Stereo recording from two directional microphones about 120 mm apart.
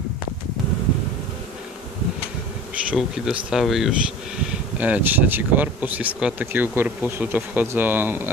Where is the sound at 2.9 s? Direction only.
5° right (ahead or behind).